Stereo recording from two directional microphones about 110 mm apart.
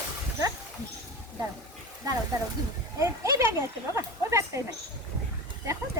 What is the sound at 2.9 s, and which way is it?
Children playing, 25° right (ahead or behind).